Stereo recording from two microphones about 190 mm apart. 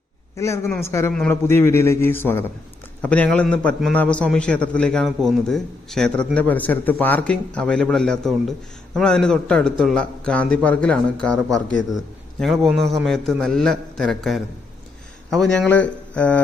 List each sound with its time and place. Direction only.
0.3 s a man's voice: 15° left (ahead or behind)